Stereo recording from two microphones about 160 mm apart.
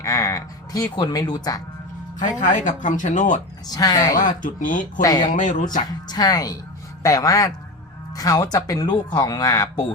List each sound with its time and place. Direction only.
0.0 s a sound: 20° left (ahead or behind)
2.4 s speech: 50° left (ahead or behind)
3.7 s speech: 25° left (ahead or behind)
4.2 s speech: 55° left (ahead or behind)
5.0 s speech: 25° left (ahead or behind)
5.3 s speech: 55° left (ahead or behind)
6.1 s speech: 25° left (ahead or behind)